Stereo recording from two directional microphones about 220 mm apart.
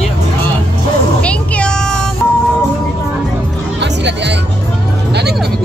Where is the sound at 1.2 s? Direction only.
5° left (ahead or behind).